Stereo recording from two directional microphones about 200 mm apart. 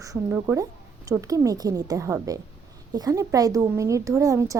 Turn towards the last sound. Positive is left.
turn(degrees=-15)  # may be behind; listen again after turning